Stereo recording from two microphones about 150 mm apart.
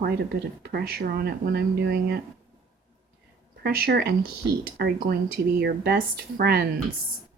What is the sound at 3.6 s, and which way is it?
Speech, 90° right.